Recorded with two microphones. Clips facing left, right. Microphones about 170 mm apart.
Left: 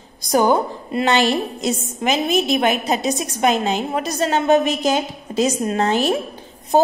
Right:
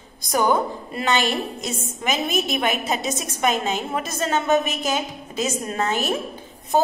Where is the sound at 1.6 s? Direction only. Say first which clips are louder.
Left 6 dB; 30° left (ahead or behind).